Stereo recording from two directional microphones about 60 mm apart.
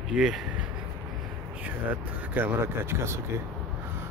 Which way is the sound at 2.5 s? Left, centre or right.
Right.